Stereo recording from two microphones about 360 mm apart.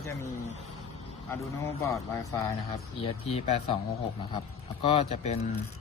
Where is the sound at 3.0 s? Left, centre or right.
Centre.